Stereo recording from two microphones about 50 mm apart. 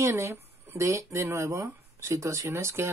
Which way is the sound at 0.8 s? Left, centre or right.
Right.